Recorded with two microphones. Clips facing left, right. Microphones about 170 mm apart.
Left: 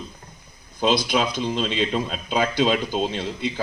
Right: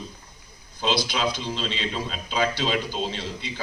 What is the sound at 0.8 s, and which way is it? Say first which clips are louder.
A man's voice: left 4 dB; 50° left (ahead or behind).